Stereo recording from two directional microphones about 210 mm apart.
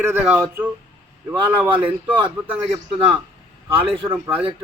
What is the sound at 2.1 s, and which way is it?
Speech, 25° right (ahead or behind).